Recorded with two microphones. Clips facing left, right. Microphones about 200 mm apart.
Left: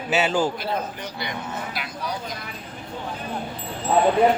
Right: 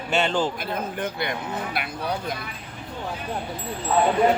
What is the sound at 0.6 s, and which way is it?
Speech, 55° right (ahead or behind).